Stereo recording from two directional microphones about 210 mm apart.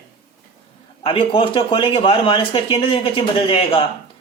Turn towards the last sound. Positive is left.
turn(degrees=25)  # may be behind; listen again after turning